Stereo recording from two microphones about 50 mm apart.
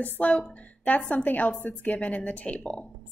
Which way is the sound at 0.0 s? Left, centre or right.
Left.